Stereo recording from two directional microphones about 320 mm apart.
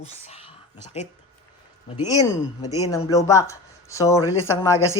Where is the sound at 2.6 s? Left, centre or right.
Centre.